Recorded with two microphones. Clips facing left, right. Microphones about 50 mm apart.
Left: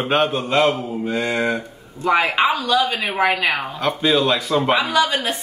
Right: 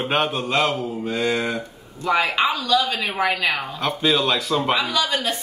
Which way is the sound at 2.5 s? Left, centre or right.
Left.